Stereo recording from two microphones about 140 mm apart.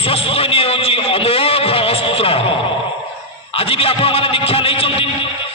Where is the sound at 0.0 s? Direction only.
40° left (ahead or behind).